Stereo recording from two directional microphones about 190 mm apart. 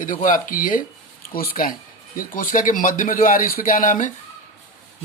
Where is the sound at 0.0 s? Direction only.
45° left (ahead or behind).